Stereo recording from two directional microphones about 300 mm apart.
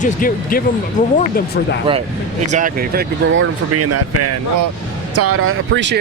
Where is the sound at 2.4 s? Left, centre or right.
Right.